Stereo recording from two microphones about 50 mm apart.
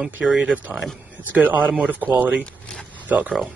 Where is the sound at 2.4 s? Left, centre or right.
Centre.